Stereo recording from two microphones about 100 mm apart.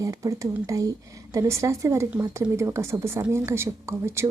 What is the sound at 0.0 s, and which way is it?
A woman's voice, 35° right (ahead or behind).